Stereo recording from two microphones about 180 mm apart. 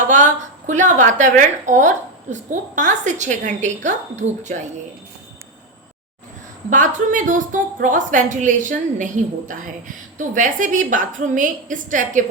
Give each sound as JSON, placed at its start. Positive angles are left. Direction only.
{"t": 0.7, "sound": "a woman's voice", "side_deg": -45}
{"t": 6.7, "sound": "a woman's voice", "side_deg": -45}